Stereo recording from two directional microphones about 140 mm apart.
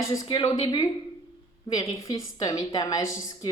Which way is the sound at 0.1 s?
30° left (ahead or behind).